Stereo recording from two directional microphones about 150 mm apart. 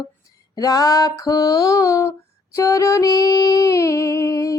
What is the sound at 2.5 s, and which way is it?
Female singing, 20° left (ahead or behind).